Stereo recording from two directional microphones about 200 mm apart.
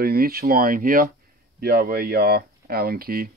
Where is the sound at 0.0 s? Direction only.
50° right (ahead or behind).